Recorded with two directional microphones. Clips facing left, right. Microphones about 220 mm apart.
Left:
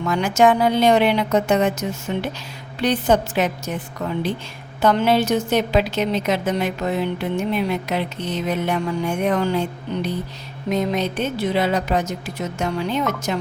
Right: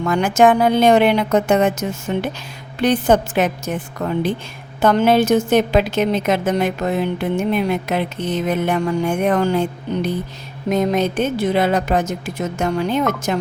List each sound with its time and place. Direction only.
0.0 s a woman's voice: 50° right (ahead or behind)